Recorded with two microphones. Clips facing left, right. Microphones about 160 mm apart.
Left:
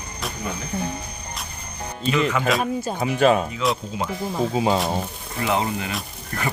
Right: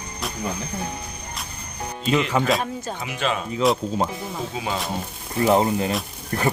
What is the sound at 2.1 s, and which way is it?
Speech, 30° right (ahead or behind).